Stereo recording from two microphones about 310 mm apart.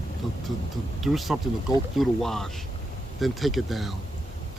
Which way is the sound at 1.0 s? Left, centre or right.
Centre.